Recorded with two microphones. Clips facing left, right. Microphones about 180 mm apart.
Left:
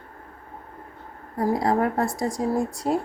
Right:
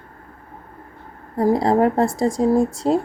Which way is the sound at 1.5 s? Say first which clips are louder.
Right 5 dB; 25° right (ahead or behind).